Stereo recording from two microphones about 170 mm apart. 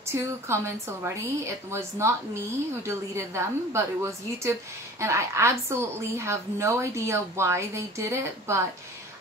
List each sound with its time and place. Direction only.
0.1 s a woman's voice: 15° right (ahead or behind)